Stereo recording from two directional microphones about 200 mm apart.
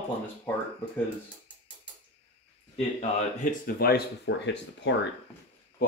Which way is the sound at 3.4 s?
50° left (ahead or behind).